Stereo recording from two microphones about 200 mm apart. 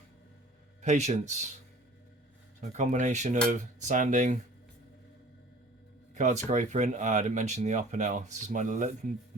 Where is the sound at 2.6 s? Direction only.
35° right (ahead or behind).